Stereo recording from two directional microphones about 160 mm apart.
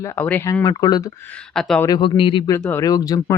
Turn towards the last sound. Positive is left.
turn(degrees=20)  # may be behind; listen again after turning